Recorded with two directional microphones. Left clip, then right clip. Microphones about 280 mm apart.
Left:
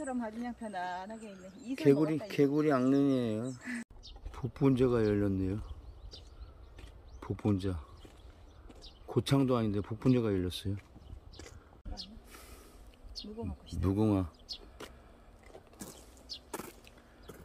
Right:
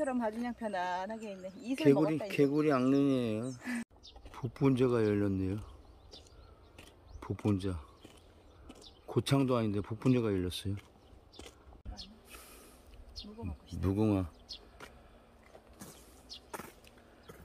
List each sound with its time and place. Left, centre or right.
0.0 s speech: centre
1.8 s speech: centre
7.2 s speech: centre
9.0 s speech: centre
12.3 s snort: centre
13.1 s insect: left
13.7 s speech: centre
14.8 s a sound: left